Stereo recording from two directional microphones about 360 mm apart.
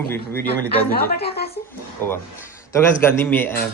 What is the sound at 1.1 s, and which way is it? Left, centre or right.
Speech, left.